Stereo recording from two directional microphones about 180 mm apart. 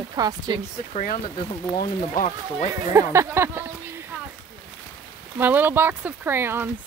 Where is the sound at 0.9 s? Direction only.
45° left (ahead or behind).